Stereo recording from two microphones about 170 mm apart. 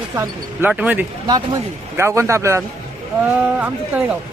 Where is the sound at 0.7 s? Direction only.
10° right (ahead or behind).